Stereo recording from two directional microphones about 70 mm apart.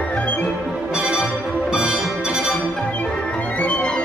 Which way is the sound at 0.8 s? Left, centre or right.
Centre.